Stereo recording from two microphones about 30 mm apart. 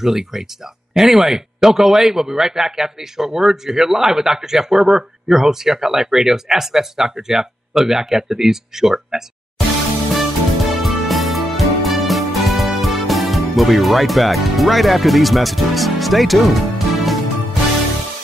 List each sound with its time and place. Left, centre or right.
0.0 s speech: centre
10.1 s music: centre